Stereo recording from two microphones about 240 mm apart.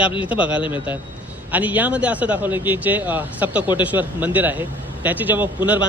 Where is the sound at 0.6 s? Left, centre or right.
Centre.